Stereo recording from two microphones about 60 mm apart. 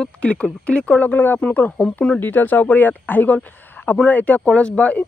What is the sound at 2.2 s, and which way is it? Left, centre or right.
Speech, left.